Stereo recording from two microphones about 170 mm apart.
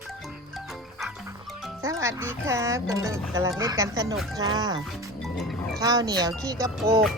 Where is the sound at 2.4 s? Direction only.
15° right (ahead or behind).